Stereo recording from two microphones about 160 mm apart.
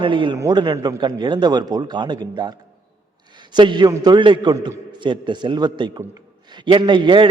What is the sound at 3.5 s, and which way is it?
A man's voice, 30° right (ahead or behind).